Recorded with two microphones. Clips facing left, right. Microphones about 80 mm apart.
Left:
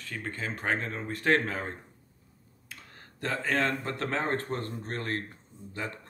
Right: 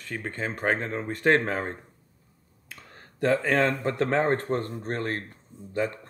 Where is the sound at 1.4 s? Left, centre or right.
Right.